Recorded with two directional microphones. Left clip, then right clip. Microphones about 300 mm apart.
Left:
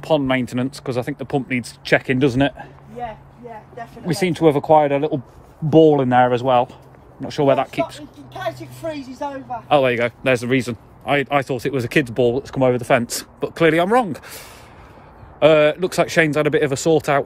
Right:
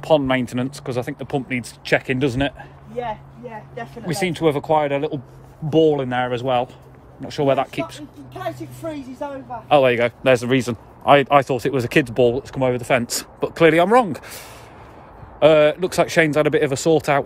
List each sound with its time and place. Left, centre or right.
0.0 s speech: centre
4.0 s speech: centre
8.3 s speech: left
9.7 s speech: centre